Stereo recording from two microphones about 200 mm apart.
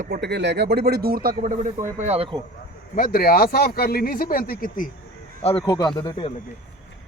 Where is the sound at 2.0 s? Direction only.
30° right (ahead or behind).